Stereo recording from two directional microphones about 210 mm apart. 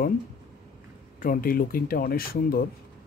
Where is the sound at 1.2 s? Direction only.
45° left (ahead or behind).